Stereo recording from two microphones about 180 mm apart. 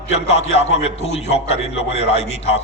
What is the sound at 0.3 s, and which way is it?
A man's voice, 35° left (ahead or behind).